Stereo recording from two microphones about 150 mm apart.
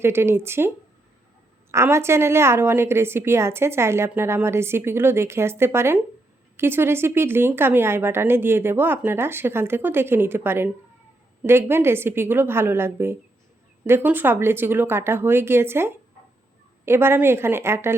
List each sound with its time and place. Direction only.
0.0 s a woman's voice: 15° right (ahead or behind)
1.7 s a woman's voice: 15° right (ahead or behind)